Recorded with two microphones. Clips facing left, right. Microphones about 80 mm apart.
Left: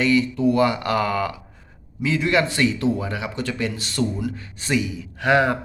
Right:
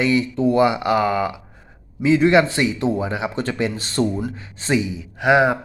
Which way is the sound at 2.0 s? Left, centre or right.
Right.